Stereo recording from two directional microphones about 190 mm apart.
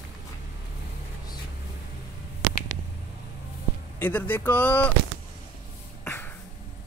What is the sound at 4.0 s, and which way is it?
Speech, 10° left (ahead or behind).